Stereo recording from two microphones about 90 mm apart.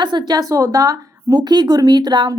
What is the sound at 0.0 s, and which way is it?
A woman's voice, 55° right (ahead or behind).